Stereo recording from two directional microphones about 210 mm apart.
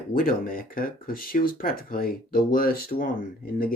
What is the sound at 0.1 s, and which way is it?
Speech, 45° left (ahead or behind).